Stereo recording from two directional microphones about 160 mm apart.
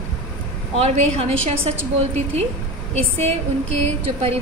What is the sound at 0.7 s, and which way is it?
Speech, 40° right (ahead or behind).